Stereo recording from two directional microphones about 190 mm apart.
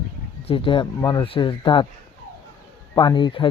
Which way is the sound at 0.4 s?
25° left (ahead or behind).